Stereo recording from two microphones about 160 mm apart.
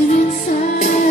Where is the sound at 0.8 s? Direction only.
50° left (ahead or behind).